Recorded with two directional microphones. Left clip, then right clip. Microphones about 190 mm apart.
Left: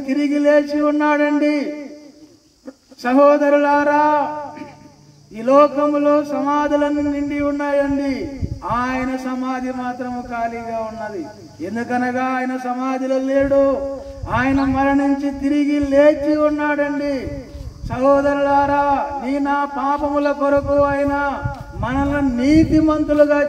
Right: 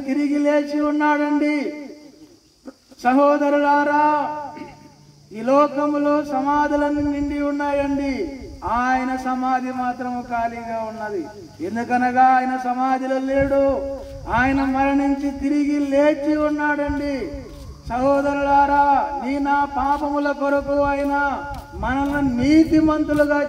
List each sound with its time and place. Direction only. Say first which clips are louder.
0.0 s speech: left 3 dB; 35° left (ahead or behind)
3.0 s speech: left 3 dB; 35° left (ahead or behind)